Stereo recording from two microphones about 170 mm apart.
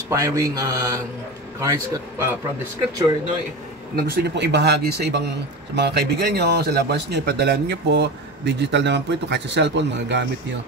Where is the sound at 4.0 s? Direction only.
70° right (ahead or behind); by 10.6 s 90° right.